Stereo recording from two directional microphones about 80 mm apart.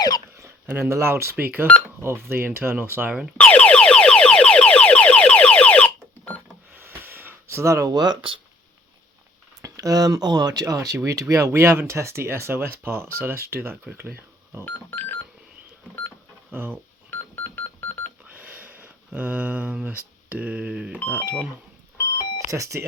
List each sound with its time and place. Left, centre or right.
0.7 s speech: right
3.1 s speech: centre
3.3 s car alarm: centre
6.7 s a sound: right
7.9 s speech: right
9.6 s speech: right
14.6 s music: left
17.1 s music: left
18.3 s a sound: right
19.7 s speech: centre
22.4 s speech: right